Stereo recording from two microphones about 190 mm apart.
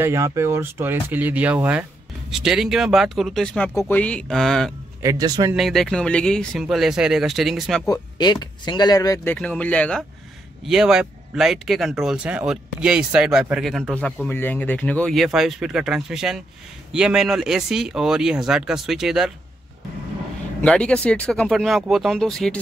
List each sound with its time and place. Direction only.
0.0 s speech: 15° right (ahead or behind); by 4.7 s centre (ahead or behind)
5.0 s speech: 20° right (ahead or behind)
5.5 s speech: centre (ahead or behind)
7.9 s speech: 20° left (ahead or behind); by 19.3 s 5° right (ahead or behind)
20.6 s speech: 5° left (ahead or behind)